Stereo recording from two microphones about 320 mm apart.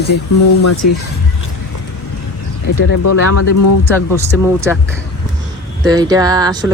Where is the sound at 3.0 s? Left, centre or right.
Left.